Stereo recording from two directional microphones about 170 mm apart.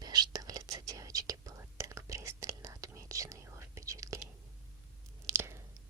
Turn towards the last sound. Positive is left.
turn(degrees=-15)  # may be behind; listen again after turning